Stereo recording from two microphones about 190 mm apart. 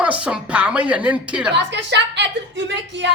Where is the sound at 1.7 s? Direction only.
65° right (ahead or behind).